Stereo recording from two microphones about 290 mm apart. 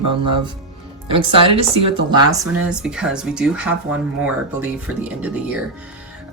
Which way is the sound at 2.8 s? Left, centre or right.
Centre.